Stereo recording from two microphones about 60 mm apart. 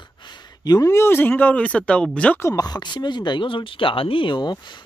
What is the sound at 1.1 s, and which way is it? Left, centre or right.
Speech, left.